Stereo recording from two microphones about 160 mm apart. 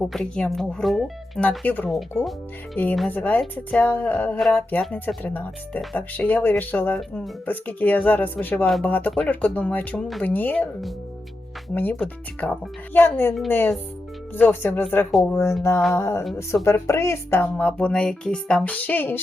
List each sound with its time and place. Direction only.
0.0 s speech: 5° left (ahead or behind)